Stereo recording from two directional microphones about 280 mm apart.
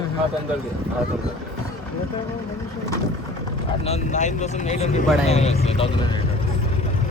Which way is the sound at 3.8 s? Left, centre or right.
Left.